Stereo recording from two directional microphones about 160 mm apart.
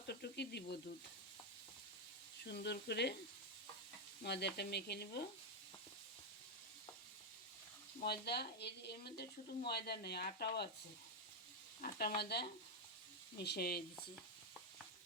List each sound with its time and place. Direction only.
0.1 s sizzle: 90° left
2.4 s speech: 90° left
4.2 s speech: 90° left
8.0 s speech: 90° left
11.8 s speech: 70° left (ahead or behind)
12.2 s speech: 90° left; by 13.8 s 75° left (ahead or behind)